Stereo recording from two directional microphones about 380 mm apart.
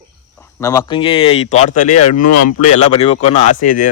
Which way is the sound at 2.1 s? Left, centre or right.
Left.